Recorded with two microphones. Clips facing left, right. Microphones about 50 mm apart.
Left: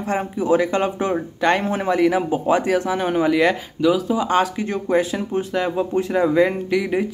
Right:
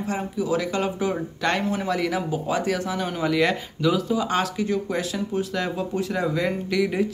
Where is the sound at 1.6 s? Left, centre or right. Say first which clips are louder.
Left 6 dB; left.